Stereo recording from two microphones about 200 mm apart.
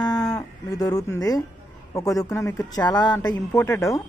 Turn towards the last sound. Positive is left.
turn(degrees=15)  # may be behind; listen again after turning